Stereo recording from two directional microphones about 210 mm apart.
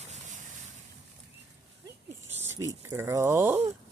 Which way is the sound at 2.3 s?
15° right (ahead or behind).